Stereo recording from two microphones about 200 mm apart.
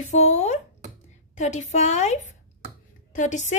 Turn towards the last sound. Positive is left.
turn(degrees=35)  # may be behind; listen again after turning